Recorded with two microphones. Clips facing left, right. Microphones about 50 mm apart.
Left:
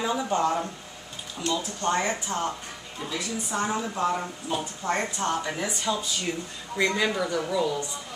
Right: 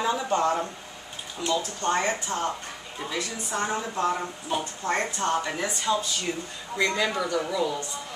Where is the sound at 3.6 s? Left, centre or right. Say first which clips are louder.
Even; centre.